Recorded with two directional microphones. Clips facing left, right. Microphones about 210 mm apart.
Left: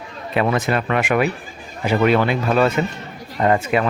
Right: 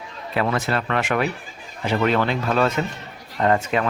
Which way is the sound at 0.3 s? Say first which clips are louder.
Left 3 dB; 15° left (ahead or behind).